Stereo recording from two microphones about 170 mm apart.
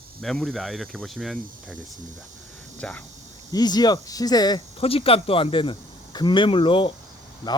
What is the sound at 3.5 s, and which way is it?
Speech, 25° left (ahead or behind).